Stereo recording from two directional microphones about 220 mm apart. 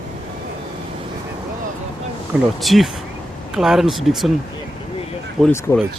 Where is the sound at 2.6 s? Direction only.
Centre (ahead or behind).